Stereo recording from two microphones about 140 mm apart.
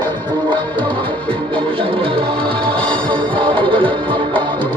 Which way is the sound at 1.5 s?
40° right (ahead or behind).